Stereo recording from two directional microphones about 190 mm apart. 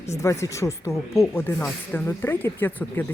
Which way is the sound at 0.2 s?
15° left (ahead or behind).